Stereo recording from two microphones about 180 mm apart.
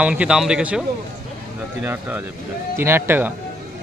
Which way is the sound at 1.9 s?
10° right (ahead or behind).